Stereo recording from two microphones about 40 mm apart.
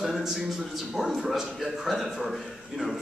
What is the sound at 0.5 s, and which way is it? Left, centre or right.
A man's voice, centre.